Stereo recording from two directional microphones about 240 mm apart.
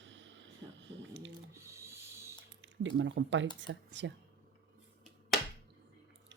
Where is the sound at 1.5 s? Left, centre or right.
Centre.